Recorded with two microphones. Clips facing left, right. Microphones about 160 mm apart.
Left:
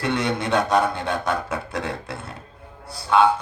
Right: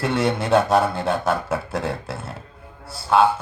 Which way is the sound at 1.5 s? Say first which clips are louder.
Right 3 dB; 30° right (ahead or behind).